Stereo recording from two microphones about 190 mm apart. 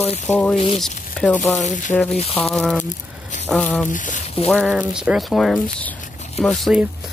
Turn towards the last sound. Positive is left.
turn(degrees=0)  # may be behind; listen again after turning